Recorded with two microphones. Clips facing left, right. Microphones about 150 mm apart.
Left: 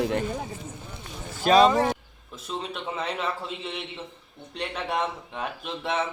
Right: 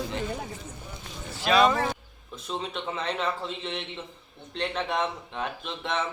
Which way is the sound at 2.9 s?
5° left (ahead or behind).